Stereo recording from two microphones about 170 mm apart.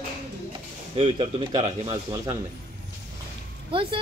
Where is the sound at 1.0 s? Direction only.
35° right (ahead or behind).